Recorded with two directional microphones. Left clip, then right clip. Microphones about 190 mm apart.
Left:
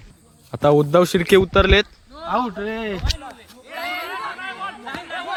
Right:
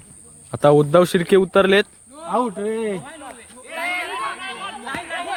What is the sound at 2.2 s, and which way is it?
Speech, 30° left (ahead or behind).